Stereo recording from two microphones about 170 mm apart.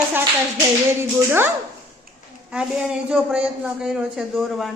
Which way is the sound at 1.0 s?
15° right (ahead or behind).